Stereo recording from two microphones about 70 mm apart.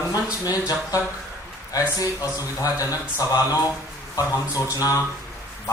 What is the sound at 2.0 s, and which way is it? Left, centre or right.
Speech, left.